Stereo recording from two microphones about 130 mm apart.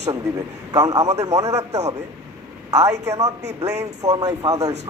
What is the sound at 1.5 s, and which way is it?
Speech, 60° right (ahead or behind).